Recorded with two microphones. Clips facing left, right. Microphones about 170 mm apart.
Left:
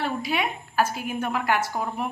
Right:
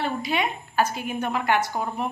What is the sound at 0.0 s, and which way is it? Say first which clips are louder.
Speech: right 1 dB; 5° left (ahead or behind).